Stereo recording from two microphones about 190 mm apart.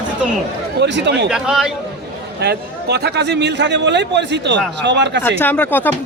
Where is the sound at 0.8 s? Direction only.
65° right (ahead or behind).